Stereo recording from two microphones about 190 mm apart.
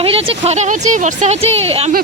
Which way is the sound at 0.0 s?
30° right (ahead or behind).